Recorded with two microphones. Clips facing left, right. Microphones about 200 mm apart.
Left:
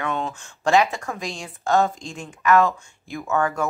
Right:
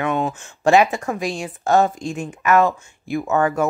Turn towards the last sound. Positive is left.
turn(degrees=-20)  # may be behind; listen again after turning